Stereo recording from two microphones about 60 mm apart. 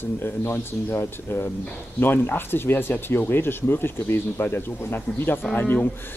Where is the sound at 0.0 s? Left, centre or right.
Left.